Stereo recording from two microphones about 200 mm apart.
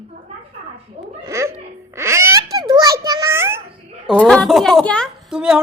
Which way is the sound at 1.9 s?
15° right (ahead or behind).